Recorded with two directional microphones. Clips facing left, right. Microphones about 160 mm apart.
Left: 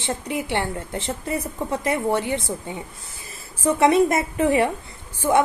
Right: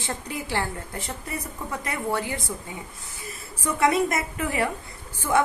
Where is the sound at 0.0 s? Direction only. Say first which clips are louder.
Left 6 dB; 20° left (ahead or behind).